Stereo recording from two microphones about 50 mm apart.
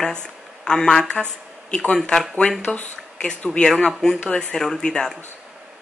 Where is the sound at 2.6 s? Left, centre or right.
Left.